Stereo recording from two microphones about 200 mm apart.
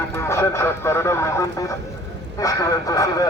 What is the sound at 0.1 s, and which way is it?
A man's voice, 15° left (ahead or behind).